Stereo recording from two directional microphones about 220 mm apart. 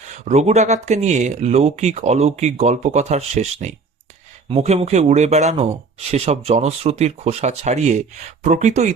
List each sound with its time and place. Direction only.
0.3 s speech: 30° right (ahead or behind)